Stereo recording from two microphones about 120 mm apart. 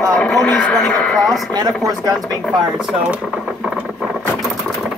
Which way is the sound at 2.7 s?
5° right (ahead or behind).